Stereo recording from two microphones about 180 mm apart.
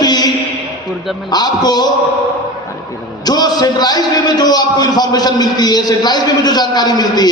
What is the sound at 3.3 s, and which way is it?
A man's voice, 20° left (ahead or behind).